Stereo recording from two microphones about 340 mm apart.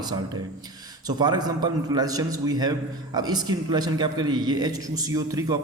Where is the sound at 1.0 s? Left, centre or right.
Centre.